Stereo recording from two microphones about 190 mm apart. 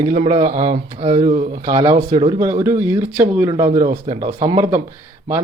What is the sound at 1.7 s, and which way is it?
Speech, 20° right (ahead or behind).